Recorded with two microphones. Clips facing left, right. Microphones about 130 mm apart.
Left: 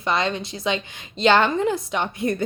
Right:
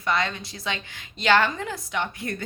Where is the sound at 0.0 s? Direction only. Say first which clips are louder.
Left 3 dB; 25° left (ahead or behind).